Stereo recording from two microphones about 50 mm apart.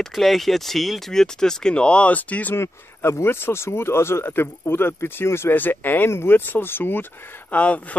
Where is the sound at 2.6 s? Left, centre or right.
Left.